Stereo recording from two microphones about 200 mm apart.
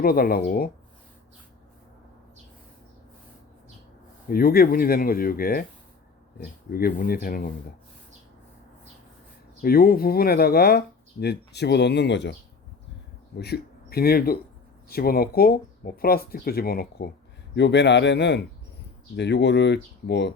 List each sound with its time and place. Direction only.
0.0 s speech: 50° left (ahead or behind)
4.3 s speech: 50° left (ahead or behind)
9.6 s speech: 50° left (ahead or behind)
17.5 s speech: 60° left (ahead or behind)